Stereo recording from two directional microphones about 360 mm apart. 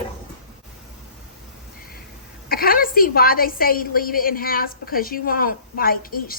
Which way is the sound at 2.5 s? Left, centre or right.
Left.